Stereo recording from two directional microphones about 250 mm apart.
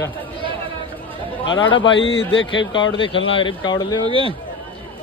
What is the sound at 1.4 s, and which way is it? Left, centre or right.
Speech, left.